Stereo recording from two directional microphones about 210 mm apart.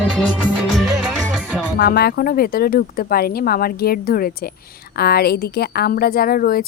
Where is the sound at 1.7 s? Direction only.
45° left (ahead or behind).